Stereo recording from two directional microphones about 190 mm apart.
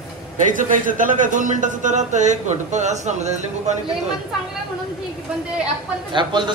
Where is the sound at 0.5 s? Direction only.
45° right (ahead or behind).